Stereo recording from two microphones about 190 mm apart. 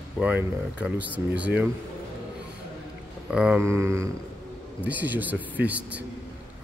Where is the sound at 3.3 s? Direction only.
5° right (ahead or behind).